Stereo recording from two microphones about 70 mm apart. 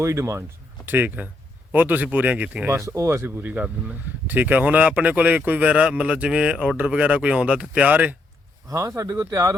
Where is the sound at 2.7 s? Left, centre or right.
Right.